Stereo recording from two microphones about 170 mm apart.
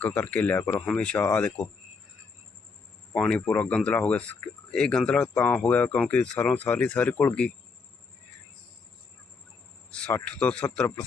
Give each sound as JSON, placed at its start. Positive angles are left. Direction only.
{"t": 0.0, "sound": "speech", "side_deg": 10}
{"t": 3.2, "sound": "speech", "side_deg": 10}
{"t": 9.9, "sound": "speech", "side_deg": 10}